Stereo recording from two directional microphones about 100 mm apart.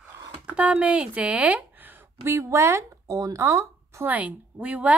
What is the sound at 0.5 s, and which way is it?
Speech, 15° right (ahead or behind).